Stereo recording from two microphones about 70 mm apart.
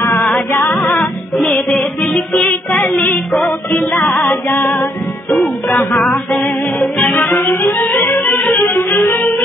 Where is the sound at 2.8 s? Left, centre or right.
Left.